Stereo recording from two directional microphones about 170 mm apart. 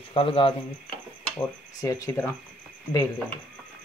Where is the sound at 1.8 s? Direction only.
20° left (ahead or behind).